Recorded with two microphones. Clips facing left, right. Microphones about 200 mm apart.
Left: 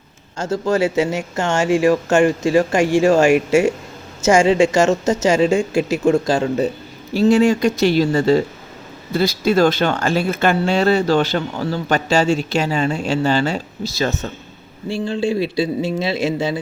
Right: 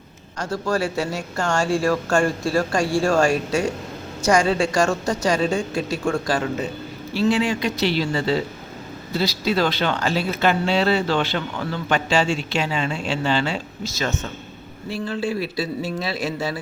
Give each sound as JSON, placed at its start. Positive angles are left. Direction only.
{"t": 0.3, "sound": "speech", "side_deg": 25}
{"t": 7.1, "sound": "speech", "side_deg": 45}